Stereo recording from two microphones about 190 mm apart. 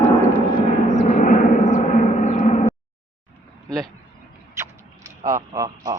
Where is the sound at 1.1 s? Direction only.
40° left (ahead or behind).